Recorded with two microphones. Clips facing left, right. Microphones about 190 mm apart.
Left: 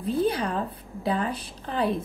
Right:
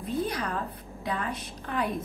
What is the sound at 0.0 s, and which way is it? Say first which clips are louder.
A woman's voice: left 5 dB; 30° left (ahead or behind).